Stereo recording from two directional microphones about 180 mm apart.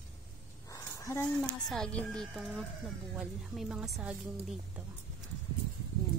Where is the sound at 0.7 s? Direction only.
15° left (ahead or behind).